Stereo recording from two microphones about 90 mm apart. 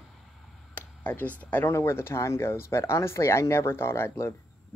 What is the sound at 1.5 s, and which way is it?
Speech, 25° left (ahead or behind).